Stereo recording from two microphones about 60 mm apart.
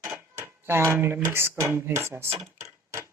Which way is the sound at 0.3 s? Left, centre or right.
Right.